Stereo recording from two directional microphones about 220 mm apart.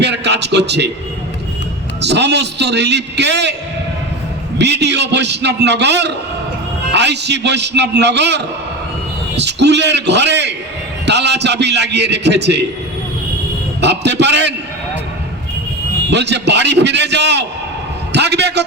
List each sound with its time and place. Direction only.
0.0 s a man's voice: 50° right (ahead or behind)
2.0 s a man's voice: 50° right (ahead or behind)
4.5 s a man's voice: 50° right (ahead or behind)
9.4 s a man's voice: 50° right (ahead or behind)
13.8 s a man's voice: 50° right (ahead or behind)
16.0 s a man's voice: 50° right (ahead or behind)
18.1 s a sound: 50° right (ahead or behind)